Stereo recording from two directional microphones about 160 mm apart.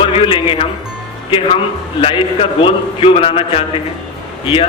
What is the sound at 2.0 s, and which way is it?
A man's voice, 35° left (ahead or behind).